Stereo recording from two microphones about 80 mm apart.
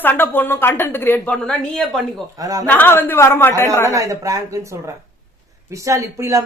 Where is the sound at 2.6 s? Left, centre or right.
Left.